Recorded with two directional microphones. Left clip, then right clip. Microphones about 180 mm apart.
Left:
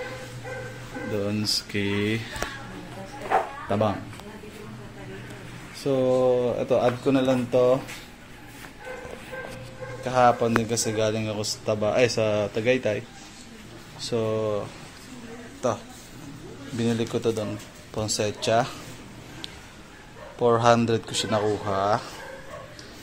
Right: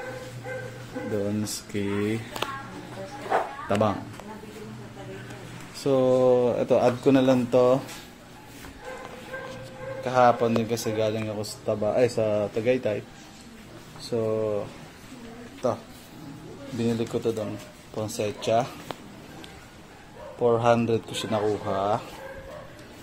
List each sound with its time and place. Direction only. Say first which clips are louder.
1.2 s speech: left 4 dB; 10° right (ahead or behind)
3.6 s speech: even; 10° right (ahead or behind)
5.8 s speech: right 1 dB; 10° right (ahead or behind)
10.0 s a man's voice: even; centre (ahead or behind)
14.1 s speech: even; 5° left (ahead or behind)
15.6 s a man's voice: left 1 dB; centre (ahead or behind)
20.3 s a man's voice: left 2 dB; 5° left (ahead or behind)